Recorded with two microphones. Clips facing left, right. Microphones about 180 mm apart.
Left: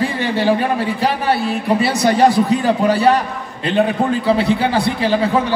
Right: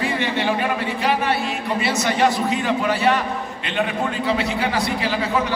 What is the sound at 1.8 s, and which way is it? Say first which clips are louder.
A man's voice: left 5 dB; 35° left (ahead or behind).